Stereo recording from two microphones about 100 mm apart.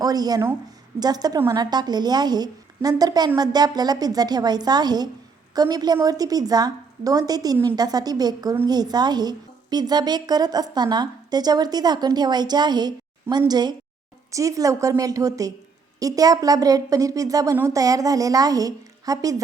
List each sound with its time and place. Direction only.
0.0 s a woman's voice: 40° right (ahead or behind)
14.3 s a woman's voice: 35° right (ahead or behind)